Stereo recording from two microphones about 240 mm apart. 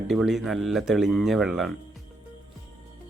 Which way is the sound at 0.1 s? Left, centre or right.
Centre.